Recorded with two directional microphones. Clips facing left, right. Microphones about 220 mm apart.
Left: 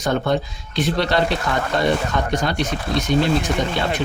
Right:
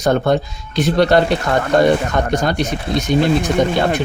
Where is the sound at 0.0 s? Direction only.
45° right (ahead or behind).